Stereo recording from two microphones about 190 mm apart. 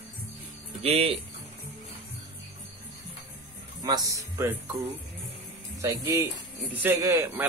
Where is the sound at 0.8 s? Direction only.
30° right (ahead or behind).